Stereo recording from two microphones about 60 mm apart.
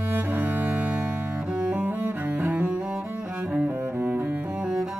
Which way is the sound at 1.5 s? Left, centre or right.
Centre.